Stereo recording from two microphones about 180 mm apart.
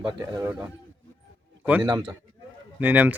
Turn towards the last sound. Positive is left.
turn(degrees=-10)  # may be behind; listen again after turning